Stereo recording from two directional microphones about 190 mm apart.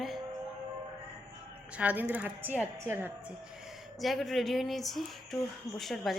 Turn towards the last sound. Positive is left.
turn(degrees=0)  # may be behind; listen again after turning